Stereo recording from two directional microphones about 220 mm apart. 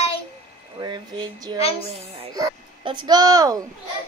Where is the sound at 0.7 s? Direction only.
20° right (ahead or behind).